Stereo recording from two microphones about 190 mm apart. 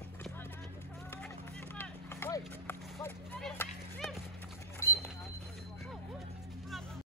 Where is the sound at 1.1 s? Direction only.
10° left (ahead or behind).